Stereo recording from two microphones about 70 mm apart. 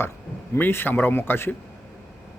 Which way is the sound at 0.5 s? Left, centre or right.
Left.